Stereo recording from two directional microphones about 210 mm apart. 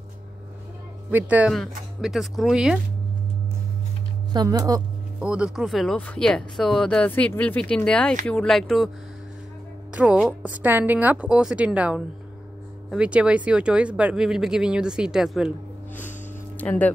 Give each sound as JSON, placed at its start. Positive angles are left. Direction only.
{"t": 1.1, "sound": "speech", "side_deg": -5}
{"t": 4.3, "sound": "a woman's voice", "side_deg": -20}
{"t": 5.2, "sound": "speech", "side_deg": -5}
{"t": 9.9, "sound": "a woman's voice", "side_deg": -5}
{"t": 16.5, "sound": "speech", "side_deg": 5}